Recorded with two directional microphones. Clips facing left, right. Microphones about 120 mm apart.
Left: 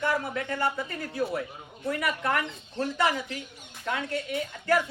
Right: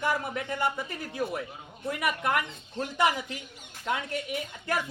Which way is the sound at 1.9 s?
15° right (ahead or behind).